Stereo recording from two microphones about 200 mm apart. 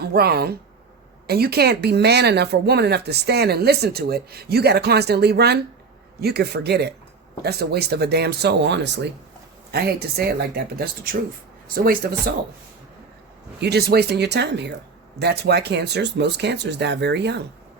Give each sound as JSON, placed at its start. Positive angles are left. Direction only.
{"t": 0.0, "sound": "speech", "side_deg": -50}
{"t": 13.6, "sound": "speech", "side_deg": -55}